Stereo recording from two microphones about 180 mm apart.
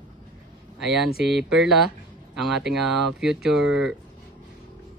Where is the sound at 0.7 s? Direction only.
Centre (ahead or behind).